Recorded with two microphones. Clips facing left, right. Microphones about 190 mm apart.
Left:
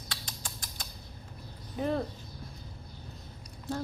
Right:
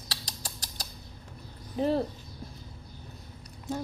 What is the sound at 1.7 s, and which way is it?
Speech, 30° right (ahead or behind).